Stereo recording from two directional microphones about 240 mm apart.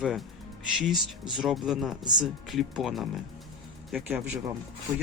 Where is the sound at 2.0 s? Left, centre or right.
Centre.